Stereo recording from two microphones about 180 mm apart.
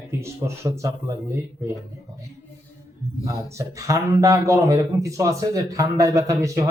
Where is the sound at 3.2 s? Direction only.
15° right (ahead or behind).